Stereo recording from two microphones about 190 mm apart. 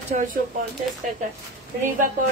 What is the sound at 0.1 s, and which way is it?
Speech, 45° right (ahead or behind).